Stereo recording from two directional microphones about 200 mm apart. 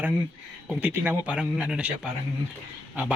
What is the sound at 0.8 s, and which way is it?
Speech, 10° right (ahead or behind).